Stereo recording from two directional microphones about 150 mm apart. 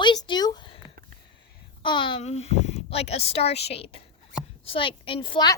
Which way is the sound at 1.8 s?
35° left (ahead or behind).